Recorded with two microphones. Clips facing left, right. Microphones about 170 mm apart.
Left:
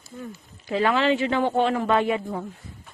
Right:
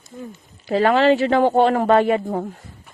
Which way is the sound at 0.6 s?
40° right (ahead or behind).